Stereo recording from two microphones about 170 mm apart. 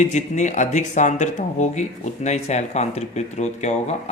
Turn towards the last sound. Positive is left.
turn(degrees=40)  # may be behind; listen again after turning